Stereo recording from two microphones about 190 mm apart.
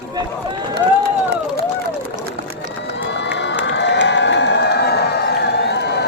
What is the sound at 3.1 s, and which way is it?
Crowd, 65° left (ahead or behind).